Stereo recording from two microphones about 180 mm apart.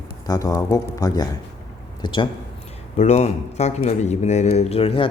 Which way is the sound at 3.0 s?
40° left (ahead or behind).